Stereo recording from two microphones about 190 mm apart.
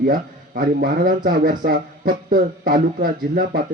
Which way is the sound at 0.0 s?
50° right (ahead or behind).